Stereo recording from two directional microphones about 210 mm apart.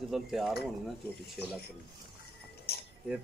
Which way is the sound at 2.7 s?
50° left (ahead or behind).